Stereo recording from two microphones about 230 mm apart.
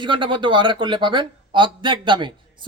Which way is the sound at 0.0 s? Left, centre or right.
Right.